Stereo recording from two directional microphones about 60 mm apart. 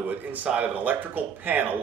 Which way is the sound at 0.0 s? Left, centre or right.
Right.